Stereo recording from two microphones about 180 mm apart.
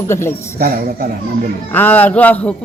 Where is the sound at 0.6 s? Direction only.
55° right (ahead or behind).